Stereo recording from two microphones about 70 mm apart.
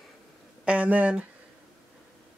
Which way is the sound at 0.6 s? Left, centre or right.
Centre.